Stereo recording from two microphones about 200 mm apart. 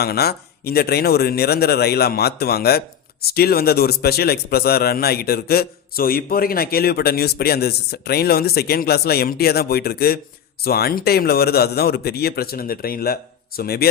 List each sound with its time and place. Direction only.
0.0 s a man's voice: 50° left (ahead or behind)